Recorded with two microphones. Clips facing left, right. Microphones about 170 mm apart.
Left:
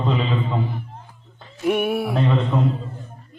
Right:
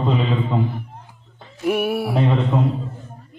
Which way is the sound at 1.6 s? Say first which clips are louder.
Even; centre (ahead or behind).